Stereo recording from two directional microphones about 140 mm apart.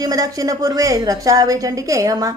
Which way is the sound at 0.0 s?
25° right (ahead or behind).